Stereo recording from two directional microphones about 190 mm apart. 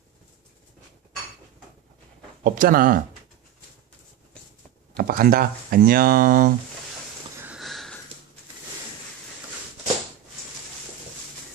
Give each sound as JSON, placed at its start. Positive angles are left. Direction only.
{"t": 2.4, "sound": "speech", "side_deg": -45}
{"t": 4.9, "sound": "speech", "side_deg": -50}
{"t": 7.4, "sound": "sniff", "side_deg": 0}